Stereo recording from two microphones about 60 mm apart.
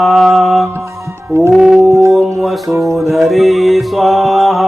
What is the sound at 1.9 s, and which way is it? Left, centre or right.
Music, right.